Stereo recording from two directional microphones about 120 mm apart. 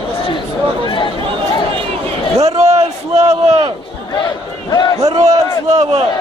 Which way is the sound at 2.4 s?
60° right (ahead or behind).